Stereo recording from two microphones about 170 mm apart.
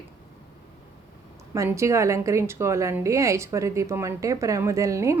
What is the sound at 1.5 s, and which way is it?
A woman's voice, 15° right (ahead or behind).